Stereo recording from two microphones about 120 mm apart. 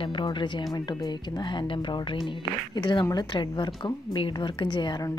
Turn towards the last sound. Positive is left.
turn(degrees=40)  # may be behind; listen again after turning